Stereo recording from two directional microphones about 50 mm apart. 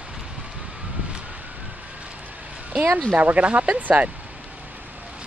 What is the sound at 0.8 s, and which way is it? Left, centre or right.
Vehicle, right.